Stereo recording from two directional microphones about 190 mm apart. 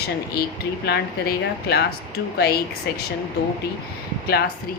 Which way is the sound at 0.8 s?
60° left (ahead or behind).